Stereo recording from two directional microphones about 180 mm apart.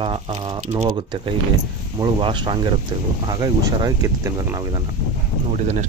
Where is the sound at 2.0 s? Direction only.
30° right (ahead or behind).